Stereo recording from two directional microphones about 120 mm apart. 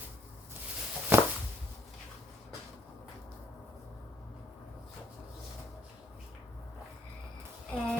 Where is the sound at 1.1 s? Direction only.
20° right (ahead or behind).